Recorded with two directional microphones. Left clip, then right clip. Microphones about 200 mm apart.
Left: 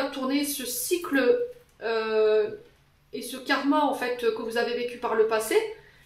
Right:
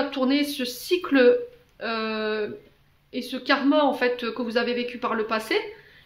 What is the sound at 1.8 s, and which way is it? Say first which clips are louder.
Speech: left 3 dB; 40° right (ahead or behind).